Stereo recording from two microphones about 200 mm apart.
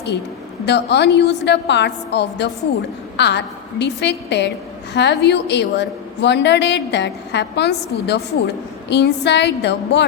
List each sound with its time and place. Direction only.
0.6 s a woman's voice: 60° left (ahead or behind)